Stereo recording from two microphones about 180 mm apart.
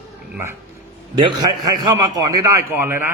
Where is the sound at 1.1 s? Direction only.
25° right (ahead or behind).